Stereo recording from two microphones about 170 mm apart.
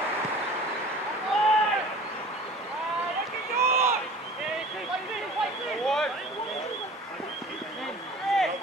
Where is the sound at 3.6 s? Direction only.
15° right (ahead or behind).